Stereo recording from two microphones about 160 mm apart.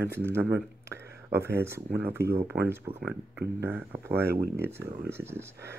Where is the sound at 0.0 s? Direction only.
15° right (ahead or behind).